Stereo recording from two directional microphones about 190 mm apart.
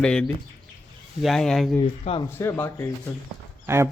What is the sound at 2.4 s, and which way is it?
Speech, 10° left (ahead or behind).